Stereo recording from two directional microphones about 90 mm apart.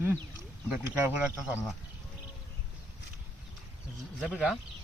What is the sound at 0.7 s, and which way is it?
Speech, 15° right (ahead or behind).